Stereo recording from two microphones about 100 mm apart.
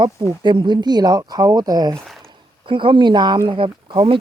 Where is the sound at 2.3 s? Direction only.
55° right (ahead or behind).